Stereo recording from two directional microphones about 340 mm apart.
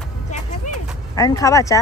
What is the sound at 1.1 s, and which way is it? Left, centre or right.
Speech, centre.